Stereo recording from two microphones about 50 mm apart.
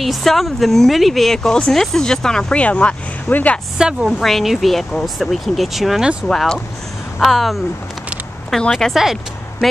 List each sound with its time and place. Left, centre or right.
0.0 s speech: centre
2.5 s speech: left
3.7 s a woman's voice: centre
4.2 s speech: centre
6.2 s speech: centre
7.2 s speech: centre
8.9 s a woman's voice: centre